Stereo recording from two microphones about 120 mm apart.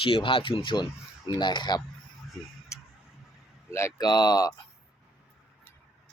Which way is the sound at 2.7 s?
25° left (ahead or behind).